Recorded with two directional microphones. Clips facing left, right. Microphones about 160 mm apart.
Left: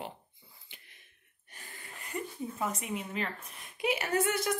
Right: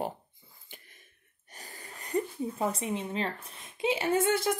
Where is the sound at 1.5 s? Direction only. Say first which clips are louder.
Right 3 dB; 40° right (ahead or behind).